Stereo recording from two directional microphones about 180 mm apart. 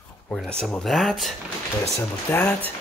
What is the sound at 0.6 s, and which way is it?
Speech, centre (ahead or behind).